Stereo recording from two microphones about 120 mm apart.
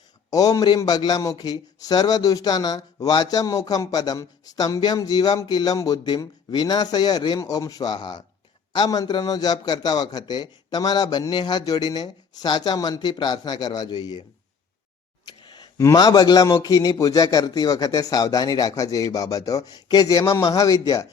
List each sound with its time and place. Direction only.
0.3 s a man's voice: 30° left (ahead or behind)
15.4 s a sound: 40° left (ahead or behind)
15.8 s a man's voice: 30° left (ahead or behind)